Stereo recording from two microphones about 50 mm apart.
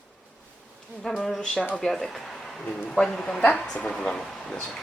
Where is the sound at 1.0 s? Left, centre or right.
Centre.